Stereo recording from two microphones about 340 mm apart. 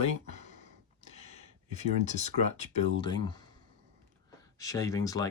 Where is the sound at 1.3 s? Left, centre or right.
Centre.